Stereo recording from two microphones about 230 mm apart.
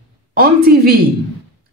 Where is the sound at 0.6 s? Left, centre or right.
Right.